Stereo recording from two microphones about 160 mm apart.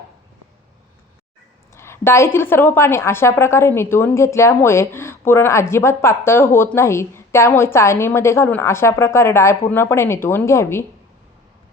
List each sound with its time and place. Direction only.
1.7 s a woman's voice: 15° left (ahead or behind)